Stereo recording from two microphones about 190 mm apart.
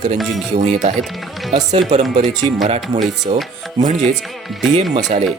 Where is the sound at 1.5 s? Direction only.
35° right (ahead or behind).